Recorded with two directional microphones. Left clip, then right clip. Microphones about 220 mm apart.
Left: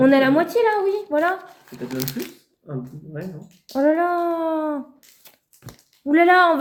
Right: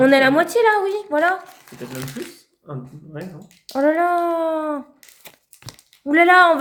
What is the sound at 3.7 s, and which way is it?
Speech, 15° right (ahead or behind).